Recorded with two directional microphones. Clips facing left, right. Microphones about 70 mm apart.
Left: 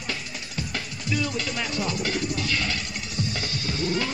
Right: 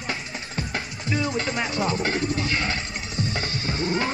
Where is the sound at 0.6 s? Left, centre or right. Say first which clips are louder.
Right 2 dB; right.